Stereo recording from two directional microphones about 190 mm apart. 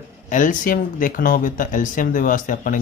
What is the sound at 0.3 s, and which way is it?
Speech, 45° left (ahead or behind).